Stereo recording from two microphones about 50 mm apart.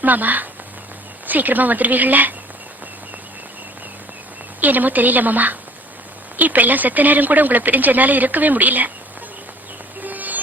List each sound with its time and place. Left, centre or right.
0.0 s speech: right
4.6 s speech: right
10.0 s music: right